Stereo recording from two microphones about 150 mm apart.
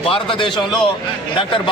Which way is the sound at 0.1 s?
35° left (ahead or behind).